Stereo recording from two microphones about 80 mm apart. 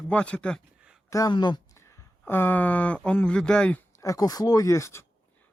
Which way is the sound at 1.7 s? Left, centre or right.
Left.